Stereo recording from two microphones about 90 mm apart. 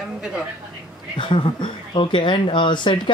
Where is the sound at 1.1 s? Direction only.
65° left (ahead or behind).